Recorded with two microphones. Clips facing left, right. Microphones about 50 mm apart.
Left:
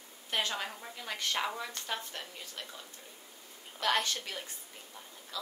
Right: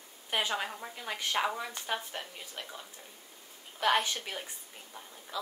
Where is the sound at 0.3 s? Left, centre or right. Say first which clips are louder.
Right 2 dB; centre.